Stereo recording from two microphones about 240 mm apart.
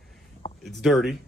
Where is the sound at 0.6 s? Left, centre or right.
Centre.